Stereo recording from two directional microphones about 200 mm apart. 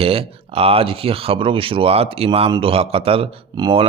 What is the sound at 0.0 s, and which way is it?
Speech, 30° right (ahead or behind).